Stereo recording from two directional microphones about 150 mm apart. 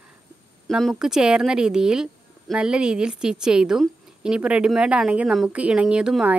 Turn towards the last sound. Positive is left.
turn(degrees=-5)  # may be behind; listen again after turning